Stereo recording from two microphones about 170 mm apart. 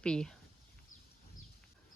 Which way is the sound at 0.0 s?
5° left (ahead or behind).